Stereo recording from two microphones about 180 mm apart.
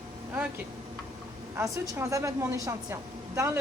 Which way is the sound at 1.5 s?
15° right (ahead or behind).